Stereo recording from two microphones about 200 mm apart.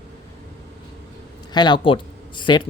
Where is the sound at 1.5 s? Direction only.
20° left (ahead or behind).